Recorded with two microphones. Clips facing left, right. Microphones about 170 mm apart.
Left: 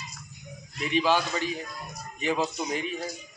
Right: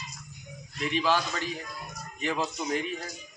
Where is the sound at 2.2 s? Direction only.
5° left (ahead or behind).